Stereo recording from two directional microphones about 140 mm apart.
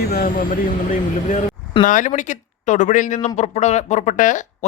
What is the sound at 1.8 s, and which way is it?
Speech, 70° left (ahead or behind).